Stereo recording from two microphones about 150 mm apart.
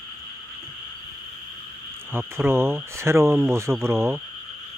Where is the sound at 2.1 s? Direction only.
15° right (ahead or behind).